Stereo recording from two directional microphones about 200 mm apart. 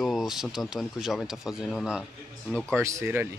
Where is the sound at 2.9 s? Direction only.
10° right (ahead or behind).